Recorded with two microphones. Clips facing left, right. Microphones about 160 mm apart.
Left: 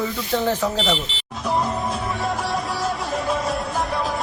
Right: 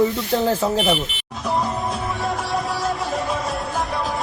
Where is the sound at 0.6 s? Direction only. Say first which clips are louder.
Right 2 dB; 30° right (ahead or behind).